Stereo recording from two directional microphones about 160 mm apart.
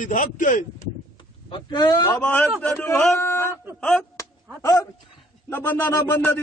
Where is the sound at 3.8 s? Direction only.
5° left (ahead or behind).